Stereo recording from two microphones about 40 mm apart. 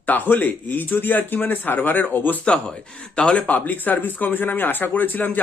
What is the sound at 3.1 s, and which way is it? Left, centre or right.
Speech, left.